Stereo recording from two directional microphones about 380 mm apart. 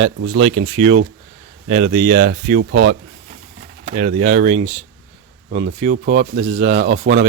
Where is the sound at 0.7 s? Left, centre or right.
Centre.